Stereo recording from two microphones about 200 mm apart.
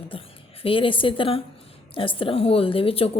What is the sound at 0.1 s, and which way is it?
A woman's voice, 30° left (ahead or behind).